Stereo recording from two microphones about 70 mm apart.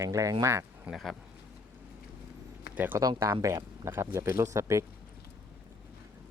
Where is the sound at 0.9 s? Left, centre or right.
Centre.